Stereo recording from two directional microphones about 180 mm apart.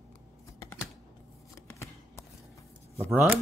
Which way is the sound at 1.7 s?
15° left (ahead or behind).